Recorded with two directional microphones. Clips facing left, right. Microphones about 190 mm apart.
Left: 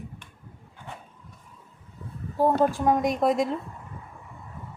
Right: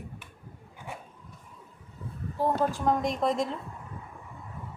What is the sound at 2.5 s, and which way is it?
Speech, 15° left (ahead or behind).